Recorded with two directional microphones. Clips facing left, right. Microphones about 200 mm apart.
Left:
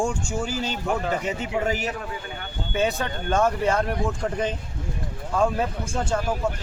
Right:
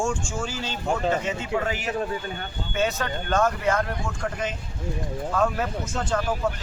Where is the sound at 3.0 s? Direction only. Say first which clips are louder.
Left 1 dB; 10° left (ahead or behind).